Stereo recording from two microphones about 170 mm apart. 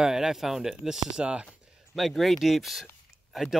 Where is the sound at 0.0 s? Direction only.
5° right (ahead or behind).